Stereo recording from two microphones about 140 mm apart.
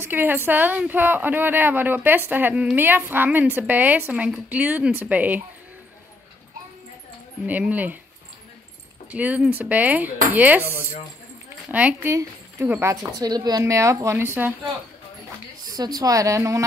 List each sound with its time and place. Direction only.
0.0 s a woman's voice: 15° right (ahead or behind)
7.4 s a woman's voice: 10° right (ahead or behind)
9.1 s a woman's voice: 10° right (ahead or behind)
10.6 s speech: 15° left (ahead or behind)
11.7 s a woman's voice: 10° right (ahead or behind)
12.9 s speech: 30° right (ahead or behind)
15.7 s speech: 30° right (ahead or behind)